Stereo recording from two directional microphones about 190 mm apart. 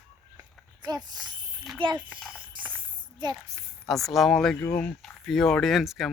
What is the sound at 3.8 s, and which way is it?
Speech, centre (ahead or behind).